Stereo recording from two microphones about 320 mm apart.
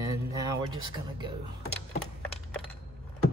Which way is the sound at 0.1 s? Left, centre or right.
Centre.